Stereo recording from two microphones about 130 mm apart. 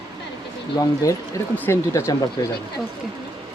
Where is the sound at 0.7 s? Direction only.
25° left (ahead or behind).